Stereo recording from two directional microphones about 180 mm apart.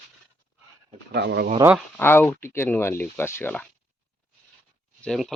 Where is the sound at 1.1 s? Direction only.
70° right (ahead or behind).